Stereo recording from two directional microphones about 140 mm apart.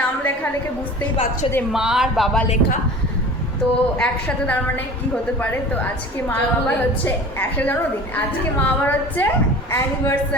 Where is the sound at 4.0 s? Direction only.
10° left (ahead or behind).